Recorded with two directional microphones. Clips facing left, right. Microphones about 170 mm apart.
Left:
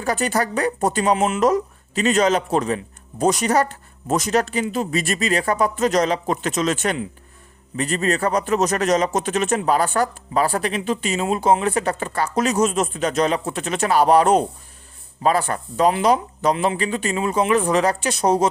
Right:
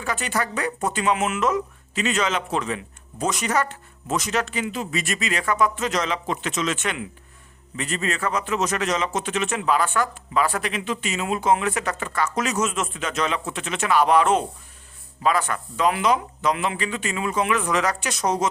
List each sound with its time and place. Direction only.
0.0 s speech: 40° left (ahead or behind)